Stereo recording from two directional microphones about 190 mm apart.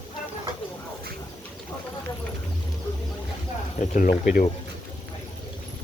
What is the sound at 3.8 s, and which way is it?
Speech, 45° left (ahead or behind).